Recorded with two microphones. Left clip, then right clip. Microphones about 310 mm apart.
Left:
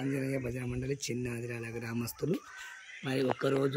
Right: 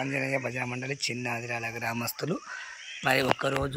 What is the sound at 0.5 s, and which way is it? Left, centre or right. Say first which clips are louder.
A man's voice: right 5 dB; centre.